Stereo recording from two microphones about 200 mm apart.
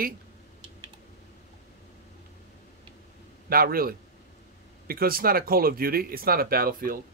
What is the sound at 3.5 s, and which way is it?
Speech, 45° right (ahead or behind).